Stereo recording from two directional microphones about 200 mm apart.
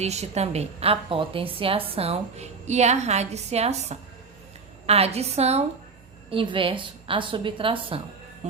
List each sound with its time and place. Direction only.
0.0 s a woman's voice: 35° right (ahead or behind)